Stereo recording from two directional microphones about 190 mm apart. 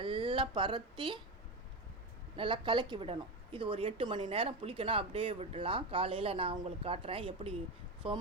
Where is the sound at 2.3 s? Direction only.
25° right (ahead or behind).